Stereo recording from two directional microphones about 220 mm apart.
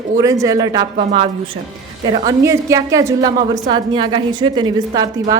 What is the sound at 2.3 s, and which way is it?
A woman's voice, 15° right (ahead or behind).